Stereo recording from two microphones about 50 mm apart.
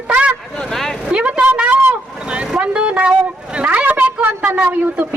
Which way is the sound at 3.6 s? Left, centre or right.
Right.